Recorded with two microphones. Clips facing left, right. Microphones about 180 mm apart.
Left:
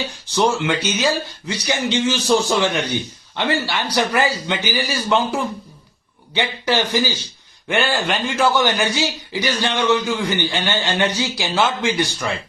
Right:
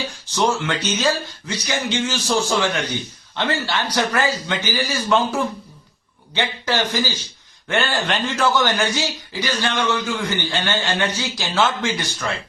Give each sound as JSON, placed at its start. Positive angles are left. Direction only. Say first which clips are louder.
{"t": 0.3, "sound": "speech", "louder": "left 2 dB", "side_deg": 15}
{"t": 6.3, "sound": "speech", "louder": "left 2 dB", "side_deg": 15}